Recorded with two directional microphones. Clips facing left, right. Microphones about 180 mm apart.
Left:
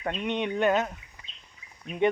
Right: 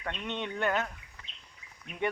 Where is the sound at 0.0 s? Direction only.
30° left (ahead or behind).